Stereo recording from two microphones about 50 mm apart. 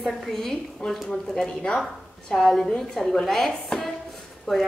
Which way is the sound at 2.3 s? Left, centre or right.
Centre.